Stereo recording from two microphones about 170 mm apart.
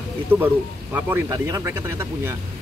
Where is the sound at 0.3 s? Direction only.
15° right (ahead or behind).